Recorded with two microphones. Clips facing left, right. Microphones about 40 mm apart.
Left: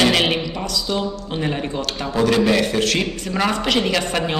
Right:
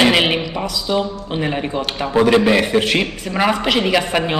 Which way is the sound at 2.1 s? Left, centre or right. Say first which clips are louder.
Right 4 dB; right.